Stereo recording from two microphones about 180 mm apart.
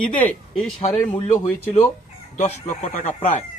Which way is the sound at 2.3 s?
40° left (ahead or behind).